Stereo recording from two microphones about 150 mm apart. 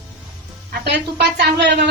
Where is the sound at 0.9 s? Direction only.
90° right.